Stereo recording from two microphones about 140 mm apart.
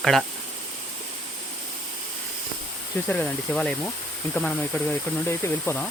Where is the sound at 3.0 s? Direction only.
10° left (ahead or behind).